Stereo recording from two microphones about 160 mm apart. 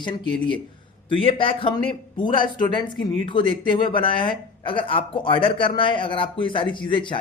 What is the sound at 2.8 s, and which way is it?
Speech, 30° left (ahead or behind).